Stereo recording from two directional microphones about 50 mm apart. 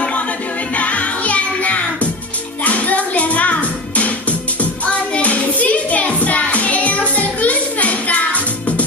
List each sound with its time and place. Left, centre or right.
0.7 s music: left